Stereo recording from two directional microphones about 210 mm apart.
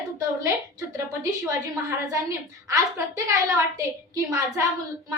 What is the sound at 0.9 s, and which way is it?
A woman's voice, 15° right (ahead or behind).